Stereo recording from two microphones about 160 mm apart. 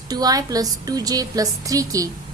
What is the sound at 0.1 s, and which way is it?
A woman's voice, 25° right (ahead or behind).